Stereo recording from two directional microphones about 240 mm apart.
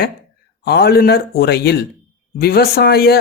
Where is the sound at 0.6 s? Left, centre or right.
Left.